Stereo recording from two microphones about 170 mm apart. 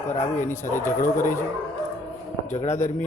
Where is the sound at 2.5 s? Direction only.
45° left (ahead or behind).